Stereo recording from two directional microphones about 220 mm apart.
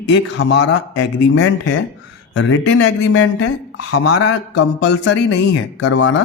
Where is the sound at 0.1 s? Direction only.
55° left (ahead or behind); by 3.2 s 85° left.